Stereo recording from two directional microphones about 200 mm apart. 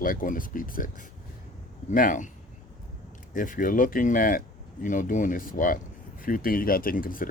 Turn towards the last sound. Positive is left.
turn(degrees=45)  # may be behind; listen again after turning